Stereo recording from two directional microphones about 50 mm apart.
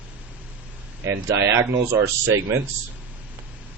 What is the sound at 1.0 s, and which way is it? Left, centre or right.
Speech, right.